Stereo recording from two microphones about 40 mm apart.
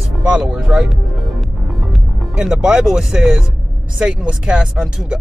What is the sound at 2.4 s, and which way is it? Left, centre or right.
Speech, centre.